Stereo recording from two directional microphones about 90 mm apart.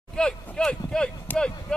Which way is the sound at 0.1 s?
10° left (ahead or behind).